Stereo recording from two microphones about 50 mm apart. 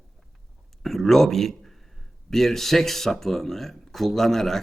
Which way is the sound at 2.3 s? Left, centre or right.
Centre.